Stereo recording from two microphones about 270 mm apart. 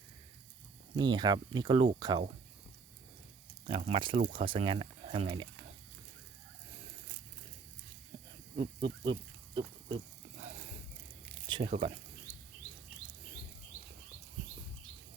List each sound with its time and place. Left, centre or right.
0.9 s speech: centre
3.7 s speech: right
8.5 s speech: centre
11.4 s squish: centre